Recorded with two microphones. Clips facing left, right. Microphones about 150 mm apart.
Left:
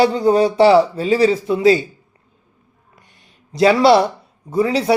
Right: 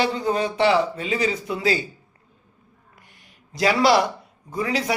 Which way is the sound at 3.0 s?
25° left (ahead or behind).